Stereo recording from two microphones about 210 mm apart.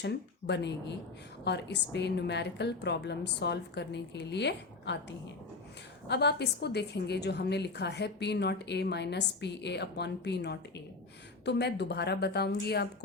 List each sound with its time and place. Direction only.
0.0 s a woman's voice: 55° left (ahead or behind)